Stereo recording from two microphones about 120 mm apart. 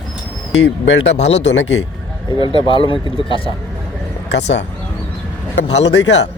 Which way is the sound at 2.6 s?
45° left (ahead or behind).